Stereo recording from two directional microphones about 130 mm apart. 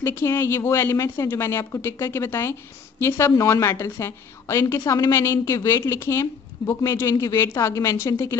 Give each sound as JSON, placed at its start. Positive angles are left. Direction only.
{"t": 0.0, "sound": "a woman's voice", "side_deg": 20}